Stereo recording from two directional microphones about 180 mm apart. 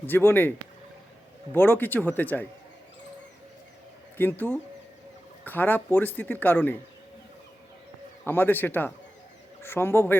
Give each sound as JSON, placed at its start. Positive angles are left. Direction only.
{"t": 0.0, "sound": "speech", "side_deg": 10}
{"t": 1.5, "sound": "speech", "side_deg": 10}
{"t": 4.2, "sound": "speech", "side_deg": 10}
{"t": 8.2, "sound": "speech", "side_deg": 10}